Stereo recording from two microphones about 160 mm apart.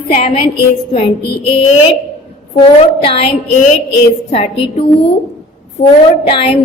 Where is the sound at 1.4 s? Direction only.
40° left (ahead or behind).